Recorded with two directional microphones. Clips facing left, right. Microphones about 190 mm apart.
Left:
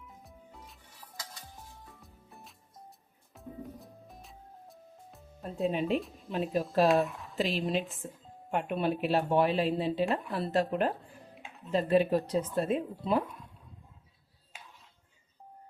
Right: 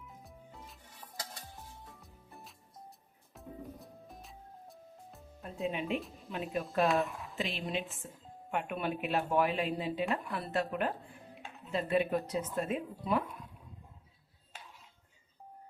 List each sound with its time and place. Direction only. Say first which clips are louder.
0.2 s music: even; centre (ahead or behind)
2.0 s music: even; centre (ahead or behind)
5.6 s speech: left 5 dB; 35° left (ahead or behind)